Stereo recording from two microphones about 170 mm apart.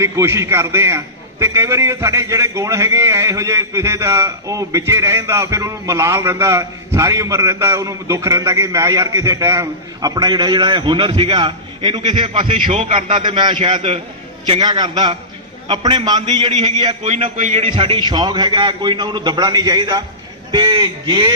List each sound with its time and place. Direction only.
0.0 s a man's voice: 15° right (ahead or behind)
17.0 s a man's voice: 35° right (ahead or behind)